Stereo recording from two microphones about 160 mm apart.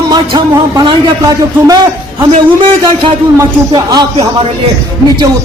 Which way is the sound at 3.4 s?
25° right (ahead or behind).